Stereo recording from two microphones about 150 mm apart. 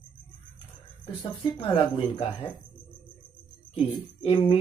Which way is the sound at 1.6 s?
40° left (ahead or behind).